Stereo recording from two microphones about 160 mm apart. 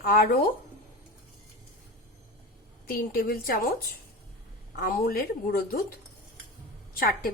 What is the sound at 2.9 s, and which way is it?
Speech, 65° left (ahead or behind).